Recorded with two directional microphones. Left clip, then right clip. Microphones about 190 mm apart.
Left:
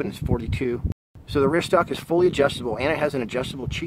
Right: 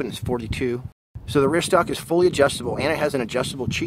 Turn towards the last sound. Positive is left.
turn(degrees=-20)  # may be behind; listen again after turning